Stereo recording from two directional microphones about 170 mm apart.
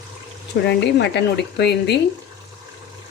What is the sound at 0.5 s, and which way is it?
Speech, 90° left.